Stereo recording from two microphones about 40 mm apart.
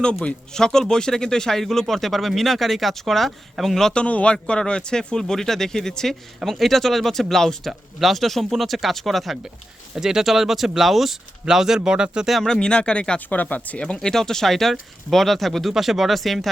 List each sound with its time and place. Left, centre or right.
0.5 s speech: centre
3.9 s speech: left; by 7.7 s centre
7.7 s speech: centre
9.9 s speech: centre
12.4 s speech: centre
13.1 s speech: left
13.8 s speech: left; by 16.5 s centre